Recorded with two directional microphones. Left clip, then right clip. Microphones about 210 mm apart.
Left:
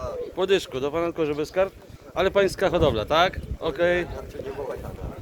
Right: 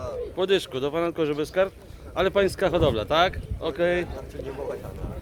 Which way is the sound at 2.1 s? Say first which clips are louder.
Left 1 dB; centre (ahead or behind).